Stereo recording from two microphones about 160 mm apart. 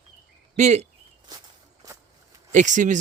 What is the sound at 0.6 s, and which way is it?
Speech, 45° right (ahead or behind).